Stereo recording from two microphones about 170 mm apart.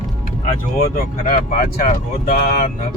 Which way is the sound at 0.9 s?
50° left (ahead or behind).